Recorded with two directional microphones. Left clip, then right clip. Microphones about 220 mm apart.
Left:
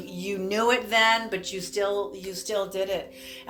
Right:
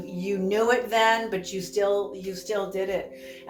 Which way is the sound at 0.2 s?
35° left (ahead or behind).